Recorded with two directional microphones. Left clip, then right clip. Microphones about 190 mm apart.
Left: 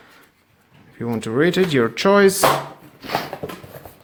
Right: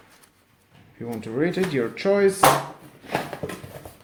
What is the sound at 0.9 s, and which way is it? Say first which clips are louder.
Speech: left 6 dB; 45° left (ahead or behind).